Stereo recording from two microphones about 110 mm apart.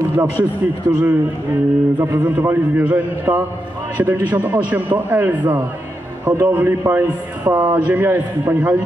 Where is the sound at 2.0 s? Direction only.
25° right (ahead or behind).